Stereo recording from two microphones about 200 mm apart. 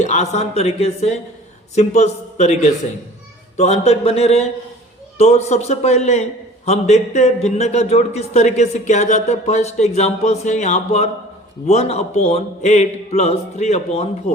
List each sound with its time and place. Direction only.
0.0 s a man's voice: 35° left (ahead or behind)